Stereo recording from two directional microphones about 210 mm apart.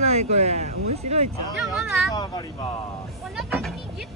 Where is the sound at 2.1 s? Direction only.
20° left (ahead or behind).